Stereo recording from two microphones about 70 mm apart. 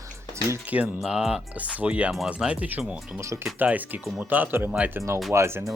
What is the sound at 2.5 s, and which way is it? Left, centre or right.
Speech, right.